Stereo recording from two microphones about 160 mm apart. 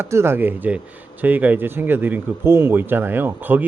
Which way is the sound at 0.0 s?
15° right (ahead or behind).